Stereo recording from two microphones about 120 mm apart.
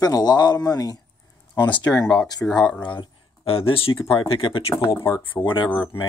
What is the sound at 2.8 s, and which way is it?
Speech, 40° left (ahead or behind).